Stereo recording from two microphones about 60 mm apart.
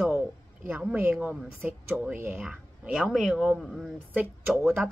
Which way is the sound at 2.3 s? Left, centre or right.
Centre.